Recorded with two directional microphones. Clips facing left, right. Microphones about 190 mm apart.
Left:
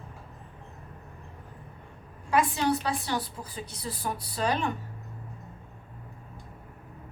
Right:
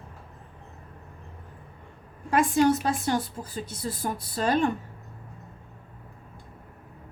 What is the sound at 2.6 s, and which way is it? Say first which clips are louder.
A woman's voice: right 4 dB; 45° right (ahead or behind).